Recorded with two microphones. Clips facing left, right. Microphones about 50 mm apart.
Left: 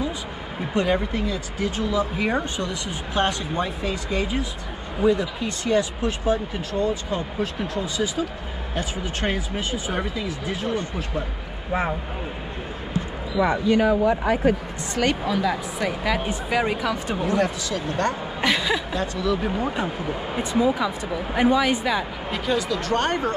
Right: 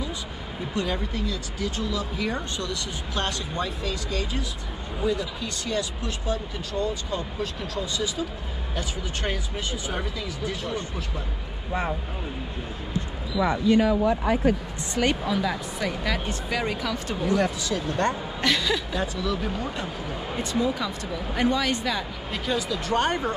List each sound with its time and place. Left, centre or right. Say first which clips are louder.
0.7 s speech: left 6 dB; left
13.5 s speech: left 1 dB; left
15.2 s speech: left 3 dB; centre; by 17.4 s left
18.4 s speech: left 2 dB; centre
18.9 s speech: left 3 dB; centre
19.4 s speech: left 5 dB; centre
22.3 s speech: left 3 dB; centre